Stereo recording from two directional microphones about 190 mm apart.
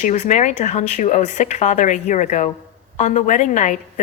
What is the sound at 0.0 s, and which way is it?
A woman's voice, 40° left (ahead or behind).